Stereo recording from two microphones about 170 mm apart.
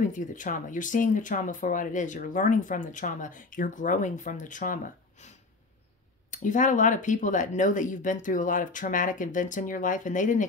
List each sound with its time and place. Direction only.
0.0 s speech: 50° left (ahead or behind)
6.3 s speech: 50° left (ahead or behind)